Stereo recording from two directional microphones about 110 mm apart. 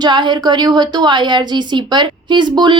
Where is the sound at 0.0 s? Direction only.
45° right (ahead or behind).